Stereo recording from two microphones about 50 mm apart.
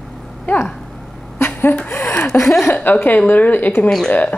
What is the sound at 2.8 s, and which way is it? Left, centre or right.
Speech, left.